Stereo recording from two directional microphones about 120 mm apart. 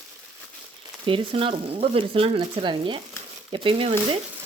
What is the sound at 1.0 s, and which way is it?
Speech, 45° right (ahead or behind).